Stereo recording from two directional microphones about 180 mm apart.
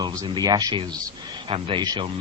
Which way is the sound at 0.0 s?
20° right (ahead or behind).